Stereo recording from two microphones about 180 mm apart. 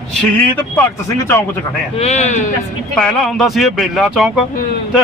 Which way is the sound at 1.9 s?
35° left (ahead or behind).